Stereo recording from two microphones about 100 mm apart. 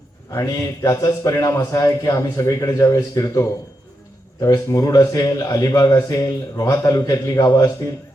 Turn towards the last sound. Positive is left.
turn(degrees=35)  # may be behind; listen again after turning